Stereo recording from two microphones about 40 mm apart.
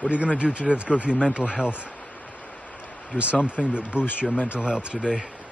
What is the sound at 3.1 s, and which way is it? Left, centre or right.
Speech, left.